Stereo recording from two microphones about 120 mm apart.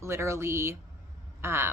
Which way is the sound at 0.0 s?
25° right (ahead or behind).